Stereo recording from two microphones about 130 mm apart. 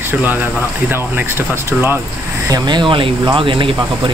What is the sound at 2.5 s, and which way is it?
Speech, 35° right (ahead or behind).